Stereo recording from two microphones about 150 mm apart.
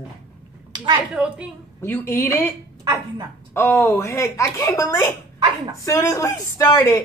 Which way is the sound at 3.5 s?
15° left (ahead or behind).